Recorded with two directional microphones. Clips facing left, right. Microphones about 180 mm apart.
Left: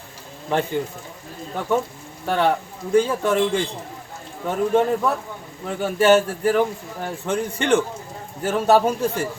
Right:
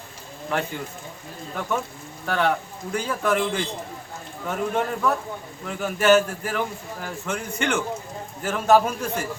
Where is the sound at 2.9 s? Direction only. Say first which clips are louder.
Left 6 dB; 30° left (ahead or behind).